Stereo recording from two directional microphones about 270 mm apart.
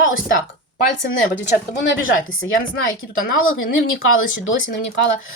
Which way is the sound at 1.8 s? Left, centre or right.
Left.